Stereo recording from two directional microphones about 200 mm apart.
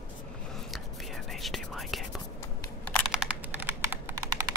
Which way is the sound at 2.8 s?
5° left (ahead or behind).